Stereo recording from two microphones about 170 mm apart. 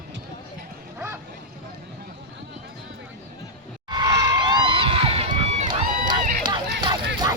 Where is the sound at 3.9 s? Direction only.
25° right (ahead or behind); by 5.7 s 40° right (ahead or behind).